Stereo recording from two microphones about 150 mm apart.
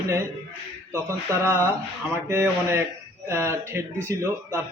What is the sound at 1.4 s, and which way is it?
A man's voice, 15° right (ahead or behind).